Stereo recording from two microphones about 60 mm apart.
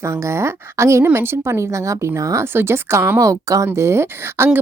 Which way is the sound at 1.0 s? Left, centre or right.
Right.